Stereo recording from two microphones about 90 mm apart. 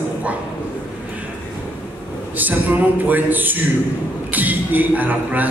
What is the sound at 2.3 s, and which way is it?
A man's voice, 20° right (ahead or behind).